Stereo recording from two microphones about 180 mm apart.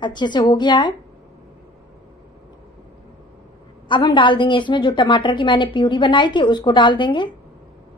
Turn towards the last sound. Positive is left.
turn(degrees=25)  # may be behind; listen again after turning